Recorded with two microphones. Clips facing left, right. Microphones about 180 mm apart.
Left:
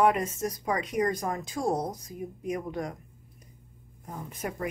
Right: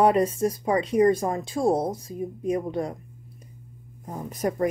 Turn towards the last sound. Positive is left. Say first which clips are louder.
# right 8 dB
turn(degrees=-40)  # may be behind; listen again after turning